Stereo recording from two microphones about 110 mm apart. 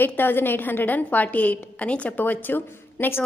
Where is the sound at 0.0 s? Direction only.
15° left (ahead or behind).